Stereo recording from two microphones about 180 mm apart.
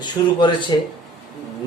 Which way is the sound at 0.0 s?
25° left (ahead or behind).